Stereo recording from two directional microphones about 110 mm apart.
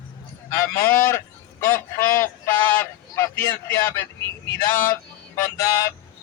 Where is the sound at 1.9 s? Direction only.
25° left (ahead or behind).